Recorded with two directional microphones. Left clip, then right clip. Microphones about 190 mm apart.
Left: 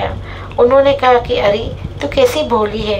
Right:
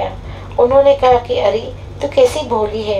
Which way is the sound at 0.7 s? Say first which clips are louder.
Even; 40° left (ahead or behind).